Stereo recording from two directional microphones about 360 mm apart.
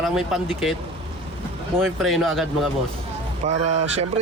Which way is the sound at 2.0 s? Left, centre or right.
Centre.